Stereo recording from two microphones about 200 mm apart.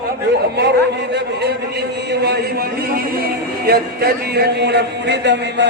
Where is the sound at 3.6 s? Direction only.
50° right (ahead or behind).